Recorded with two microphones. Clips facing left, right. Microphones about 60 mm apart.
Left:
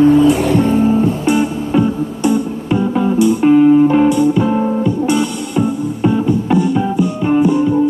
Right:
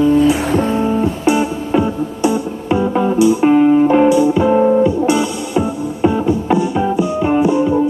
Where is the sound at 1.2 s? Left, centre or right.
Centre.